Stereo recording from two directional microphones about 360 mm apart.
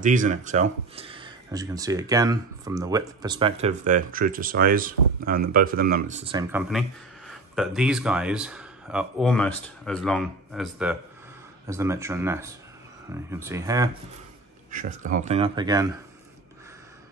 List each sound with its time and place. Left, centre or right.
0.0 s speech: right
7.2 s speech: centre
14.7 s speech: right